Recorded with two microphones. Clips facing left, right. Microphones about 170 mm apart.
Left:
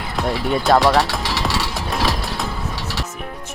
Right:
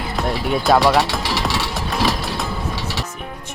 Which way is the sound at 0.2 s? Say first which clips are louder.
Left 1 dB; centre (ahead or behind).